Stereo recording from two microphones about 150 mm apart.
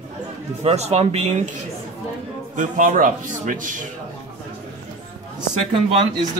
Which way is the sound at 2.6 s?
60° right (ahead or behind).